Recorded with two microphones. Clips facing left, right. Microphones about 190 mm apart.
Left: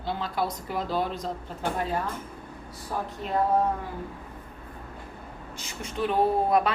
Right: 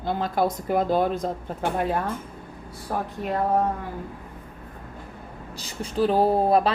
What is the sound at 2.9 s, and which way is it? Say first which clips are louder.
Speech: right 3 dB; 55° right (ahead or behind).